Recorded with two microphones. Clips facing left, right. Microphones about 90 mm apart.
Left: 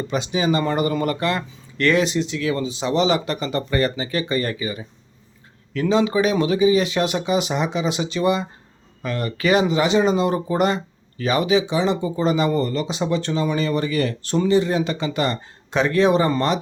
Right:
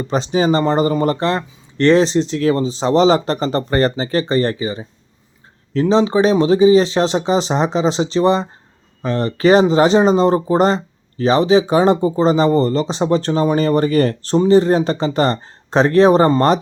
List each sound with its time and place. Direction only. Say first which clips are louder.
0.1 s speech: right 6 dB; 40° right (ahead or behind)